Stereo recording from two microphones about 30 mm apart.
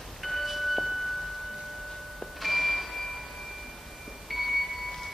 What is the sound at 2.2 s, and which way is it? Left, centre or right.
Tubular bells, centre.